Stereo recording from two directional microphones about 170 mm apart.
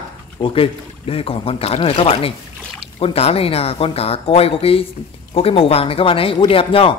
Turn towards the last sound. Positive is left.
turn(degrees=30)  # may be behind; listen again after turning